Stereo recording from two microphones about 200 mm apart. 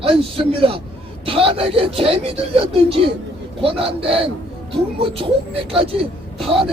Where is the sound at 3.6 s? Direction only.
25° right (ahead or behind).